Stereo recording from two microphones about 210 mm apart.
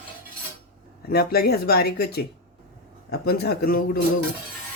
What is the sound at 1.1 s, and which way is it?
Speech, 45° left (ahead or behind).